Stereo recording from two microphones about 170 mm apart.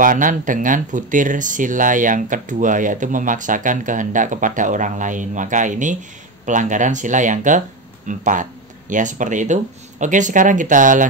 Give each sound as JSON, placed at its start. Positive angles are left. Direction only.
{"t": 0.0, "sound": "speech", "side_deg": -50}